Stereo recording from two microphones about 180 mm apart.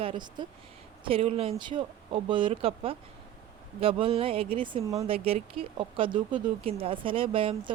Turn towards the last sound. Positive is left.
turn(degrees=-30)  # may be behind; listen again after turning